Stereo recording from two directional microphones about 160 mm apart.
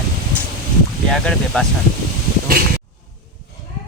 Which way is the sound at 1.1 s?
5° left (ahead or behind).